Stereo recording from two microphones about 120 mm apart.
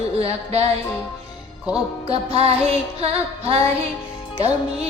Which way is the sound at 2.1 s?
60° right (ahead or behind).